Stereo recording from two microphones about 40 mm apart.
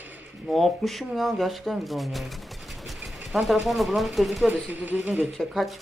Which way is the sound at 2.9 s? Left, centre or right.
Centre.